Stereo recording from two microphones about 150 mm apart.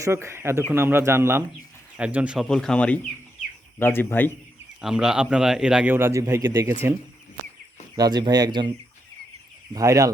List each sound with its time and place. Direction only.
0.0 s a man's voice: 20° right (ahead or behind)
2.5 s speech: 5° left (ahead or behind)
4.8 s a man's voice: 5° right (ahead or behind)
7.9 s speech: 25° right (ahead or behind)
9.7 s speech: 20° right (ahead or behind)